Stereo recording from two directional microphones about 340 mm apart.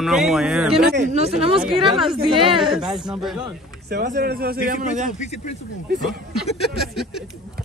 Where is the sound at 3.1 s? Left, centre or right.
Centre.